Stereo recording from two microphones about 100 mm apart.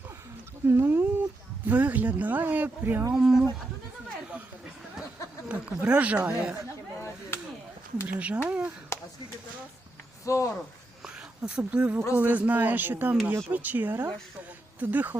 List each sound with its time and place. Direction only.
0.7 s a sound: 20° right (ahead or behind)
1.6 s speech: 15° right (ahead or behind)
3.2 s speech: 5° right (ahead or behind)
5.5 s speech: 10° right (ahead or behind)
8.0 s speech: 15° right (ahead or behind)
8.9 s a sound: 30° left (ahead or behind)
10.2 s speech: 30° left (ahead or behind)
11.0 s a sound: 10° right (ahead or behind)
12.1 s a woman's voice: 15° right (ahead or behind)